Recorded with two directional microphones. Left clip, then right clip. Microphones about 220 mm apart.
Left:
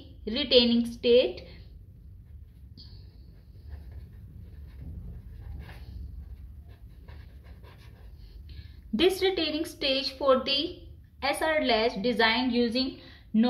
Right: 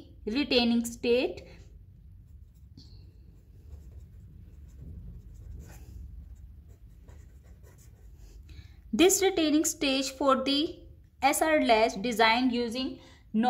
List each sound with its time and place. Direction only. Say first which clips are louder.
0.2 s a woman's voice: left 4 dB; 50° right (ahead or behind)
8.5 s a woman's voice: right 3 dB; 55° right (ahead or behind)